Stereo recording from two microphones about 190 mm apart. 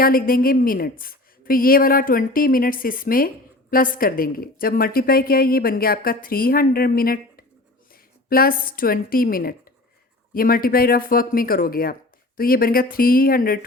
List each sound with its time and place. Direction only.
0.0 s a woman's voice: 50° left (ahead or behind)